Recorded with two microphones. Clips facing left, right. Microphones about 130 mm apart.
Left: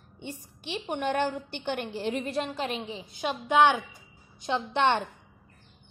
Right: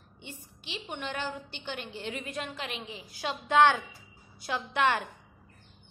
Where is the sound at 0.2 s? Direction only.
50° left (ahead or behind).